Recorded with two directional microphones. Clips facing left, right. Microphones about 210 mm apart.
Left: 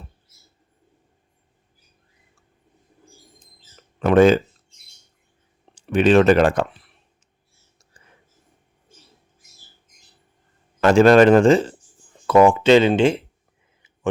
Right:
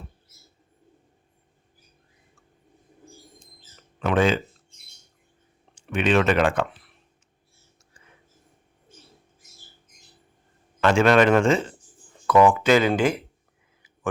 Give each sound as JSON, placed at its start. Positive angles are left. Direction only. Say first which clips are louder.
{"t": 4.0, "sound": "a man's voice", "louder": "left 8 dB", "side_deg": 40}
{"t": 5.7, "sound": "speech", "louder": "left 7 dB", "side_deg": 35}
{"t": 10.8, "sound": "a man's voice", "louder": "left 6 dB", "side_deg": 35}